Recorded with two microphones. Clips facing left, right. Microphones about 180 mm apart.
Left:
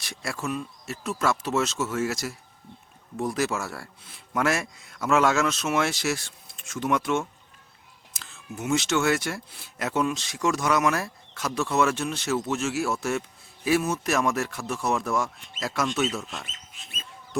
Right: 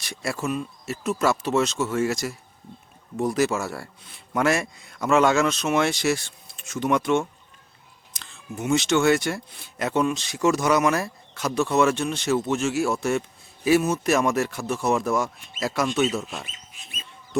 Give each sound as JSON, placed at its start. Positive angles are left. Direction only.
{"t": 0.0, "sound": "speech", "side_deg": 0}